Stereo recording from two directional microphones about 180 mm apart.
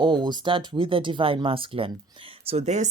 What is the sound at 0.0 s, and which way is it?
Speech, 25° right (ahead or behind).